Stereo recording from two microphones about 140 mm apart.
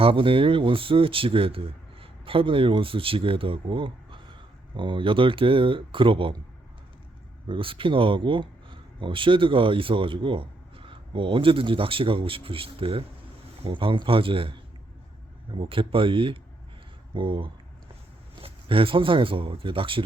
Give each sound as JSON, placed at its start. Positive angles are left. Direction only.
{"t": 0.0, "sound": "speech", "side_deg": -40}
{"t": 7.4, "sound": "speech", "side_deg": -40}
{"t": 15.5, "sound": "speech", "side_deg": -40}